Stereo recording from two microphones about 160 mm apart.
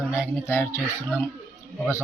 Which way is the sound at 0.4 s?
15° left (ahead or behind).